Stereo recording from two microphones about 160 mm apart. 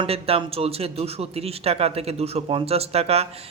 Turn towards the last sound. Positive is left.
turn(degrees=-40)  # may be behind; listen again after turning